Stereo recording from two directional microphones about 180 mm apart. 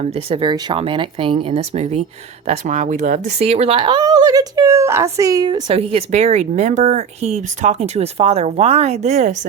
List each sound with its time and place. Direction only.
0.3 s speech: 25° right (ahead or behind)